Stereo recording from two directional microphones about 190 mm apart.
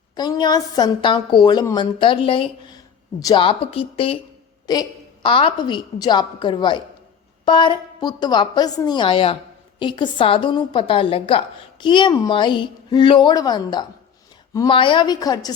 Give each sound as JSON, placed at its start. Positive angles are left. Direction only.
{"t": 0.2, "sound": "a woman's voice", "side_deg": 20}